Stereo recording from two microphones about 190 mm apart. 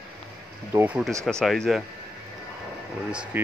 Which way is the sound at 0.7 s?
5° right (ahead or behind).